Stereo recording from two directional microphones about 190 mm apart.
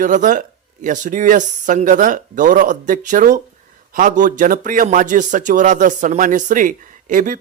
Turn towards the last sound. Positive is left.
turn(degrees=-45)  # may be behind; listen again after turning